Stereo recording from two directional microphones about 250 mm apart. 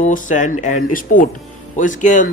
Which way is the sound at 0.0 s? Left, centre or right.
Left.